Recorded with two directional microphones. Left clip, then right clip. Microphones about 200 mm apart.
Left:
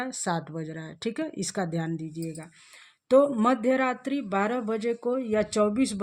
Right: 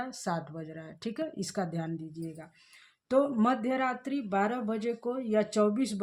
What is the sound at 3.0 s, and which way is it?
Speech, 40° left (ahead or behind).